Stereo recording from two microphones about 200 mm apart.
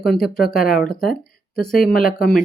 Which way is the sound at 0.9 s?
50° left (ahead or behind).